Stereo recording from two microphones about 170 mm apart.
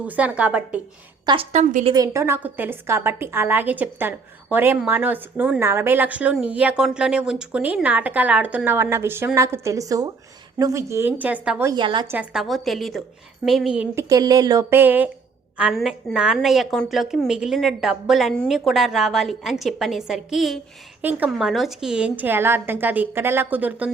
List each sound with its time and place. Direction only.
0.0 s a woman's voice: 10° right (ahead or behind)
1.2 s a woman's voice: 25° right (ahead or behind)
1.5 s a woman's voice: 45° right (ahead or behind)
1.9 s a woman's voice: 20° right (ahead or behind)
11.7 s speech: 30° right (ahead or behind)
12.0 s a woman's voice: 10° right (ahead or behind)
13.9 s a woman's voice: 20° right (ahead or behind)